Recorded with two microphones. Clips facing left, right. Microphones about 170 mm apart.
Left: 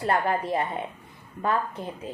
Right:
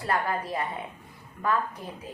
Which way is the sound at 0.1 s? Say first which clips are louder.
Left 3 dB; 25° left (ahead or behind).